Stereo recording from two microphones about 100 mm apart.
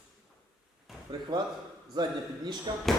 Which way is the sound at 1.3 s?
50° right (ahead or behind).